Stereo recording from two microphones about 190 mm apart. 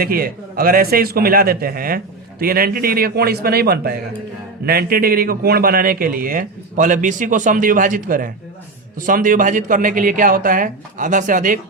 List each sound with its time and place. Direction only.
0.0 s a man's voice: 50° right (ahead or behind)